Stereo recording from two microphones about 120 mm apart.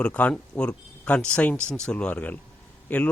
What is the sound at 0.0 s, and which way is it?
Speech, 10° left (ahead or behind).